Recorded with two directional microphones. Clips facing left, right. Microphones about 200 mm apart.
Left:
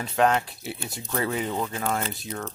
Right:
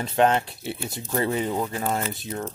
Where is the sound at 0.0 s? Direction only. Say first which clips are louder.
Right 2 dB; 30° right (ahead or behind).